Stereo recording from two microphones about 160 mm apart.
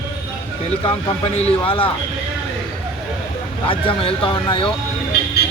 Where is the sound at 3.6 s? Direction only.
35° left (ahead or behind).